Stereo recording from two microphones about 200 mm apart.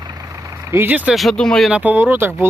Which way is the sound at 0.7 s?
10° right (ahead or behind).